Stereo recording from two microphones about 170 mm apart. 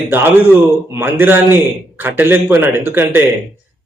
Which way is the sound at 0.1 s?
15° right (ahead or behind).